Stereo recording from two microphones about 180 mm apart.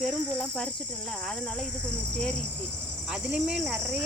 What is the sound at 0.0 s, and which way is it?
Speech, 5° left (ahead or behind).